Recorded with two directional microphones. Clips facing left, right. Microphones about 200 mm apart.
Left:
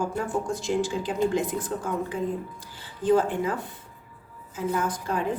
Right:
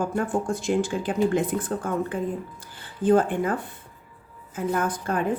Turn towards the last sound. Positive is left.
turn(degrees=-55)  # may be behind; listen again after turning